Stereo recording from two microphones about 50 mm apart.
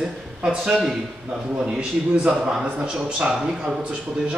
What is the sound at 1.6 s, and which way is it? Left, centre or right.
Speech, right.